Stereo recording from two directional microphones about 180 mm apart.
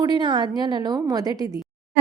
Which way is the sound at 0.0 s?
25° right (ahead or behind).